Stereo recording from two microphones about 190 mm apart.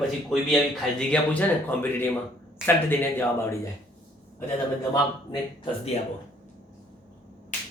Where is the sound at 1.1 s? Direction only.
5° left (ahead or behind).